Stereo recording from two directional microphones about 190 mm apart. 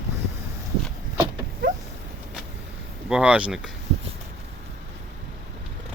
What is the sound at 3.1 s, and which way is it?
Speech, 5° right (ahead or behind).